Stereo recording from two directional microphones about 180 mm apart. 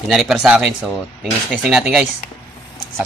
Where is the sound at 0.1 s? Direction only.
Centre (ahead or behind).